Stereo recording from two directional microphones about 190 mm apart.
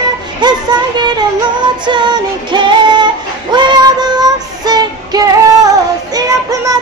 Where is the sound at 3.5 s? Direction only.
20° right (ahead or behind).